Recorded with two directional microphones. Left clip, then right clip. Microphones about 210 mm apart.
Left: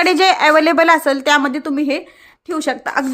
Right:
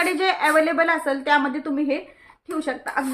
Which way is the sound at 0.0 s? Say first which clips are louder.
Left 8 dB; 50° left (ahead or behind).